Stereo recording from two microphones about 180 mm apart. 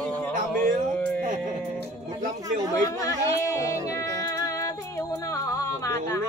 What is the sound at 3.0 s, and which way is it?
Speech, 15° left (ahead or behind).